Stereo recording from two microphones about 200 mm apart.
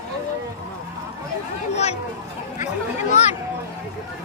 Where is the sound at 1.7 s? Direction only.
30° left (ahead or behind).